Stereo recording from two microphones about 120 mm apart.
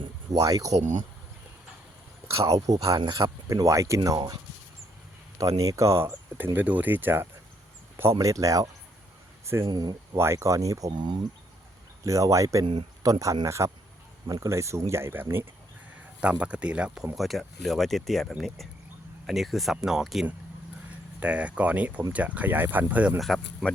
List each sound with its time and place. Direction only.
0.4 s speech: 30° right (ahead or behind)
0.7 s speech: 85° right
2.7 s speech: 30° right (ahead or behind)
3.0 s speech: 40° right (ahead or behind)
3.2 s speech: 25° right (ahead or behind)
5.4 s speech: 30° right (ahead or behind)
8.2 s speech: 30° right (ahead or behind)
10.2 s speech: 25° right (ahead or behind)
23.2 s speech: centre (ahead or behind)